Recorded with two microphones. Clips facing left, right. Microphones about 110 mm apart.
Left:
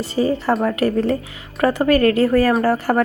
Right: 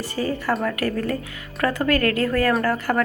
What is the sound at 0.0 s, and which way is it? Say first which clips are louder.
A woman's voice: left 6 dB; 25° left (ahead or behind).